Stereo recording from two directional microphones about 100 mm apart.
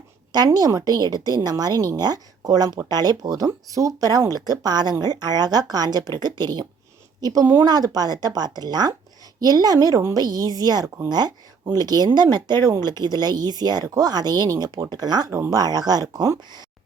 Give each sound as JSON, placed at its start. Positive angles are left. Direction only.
{"t": 0.3, "sound": "a woman's voice", "side_deg": -40}
{"t": 15.3, "sound": "speech", "side_deg": -25}
{"t": 15.5, "sound": "speech", "side_deg": -40}